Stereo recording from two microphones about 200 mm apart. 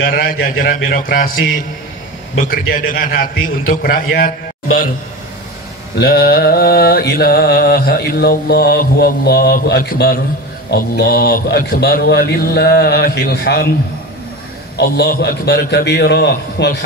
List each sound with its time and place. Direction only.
0.0 s mantra: 50° left (ahead or behind)
5.9 s mantra: 50° left (ahead or behind)
14.8 s a man's voice: 55° left (ahead or behind)